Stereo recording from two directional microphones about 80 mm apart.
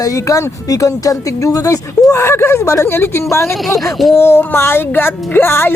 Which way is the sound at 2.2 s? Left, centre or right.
Left.